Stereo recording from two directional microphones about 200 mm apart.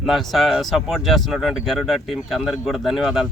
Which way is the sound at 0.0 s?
Centre (ahead or behind).